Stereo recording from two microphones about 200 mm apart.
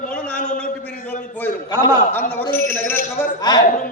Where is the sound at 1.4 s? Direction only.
10° left (ahead or behind).